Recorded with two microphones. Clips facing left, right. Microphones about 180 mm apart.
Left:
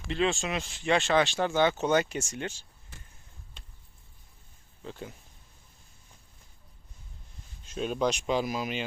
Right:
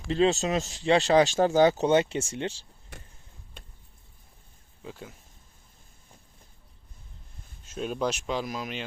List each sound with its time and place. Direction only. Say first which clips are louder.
0.1 s speech: right 5 dB; 40° right (ahead or behind)
4.8 s speech: left 1 dB; 5° right (ahead or behind)
7.7 s speech: left 1 dB; centre (ahead or behind)